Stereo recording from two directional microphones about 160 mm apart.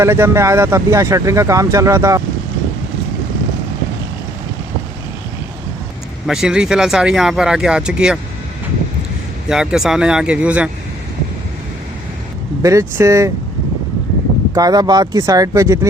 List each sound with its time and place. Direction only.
0.0 s speech: 15° right (ahead or behind)
6.2 s speech: 5° right (ahead or behind)
9.5 s speech: 5° right (ahead or behind)
12.6 s speech: 20° right (ahead or behind)
14.5 s speech: 25° right (ahead or behind)